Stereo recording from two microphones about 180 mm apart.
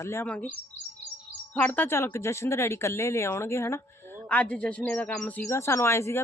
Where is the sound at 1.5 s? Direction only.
10° left (ahead or behind).